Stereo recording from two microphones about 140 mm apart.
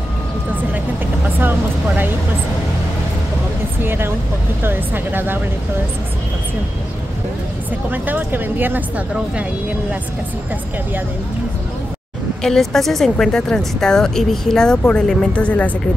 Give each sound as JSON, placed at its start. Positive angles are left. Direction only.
{"t": 3.8, "sound": "speech", "side_deg": -15}
{"t": 7.9, "sound": "speech", "side_deg": -15}
{"t": 12.4, "sound": "speech", "side_deg": 5}